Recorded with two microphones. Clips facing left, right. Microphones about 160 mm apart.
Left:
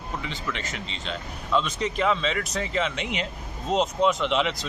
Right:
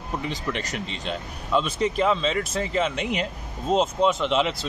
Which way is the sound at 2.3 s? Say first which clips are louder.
Right 3 dB; 30° right (ahead or behind).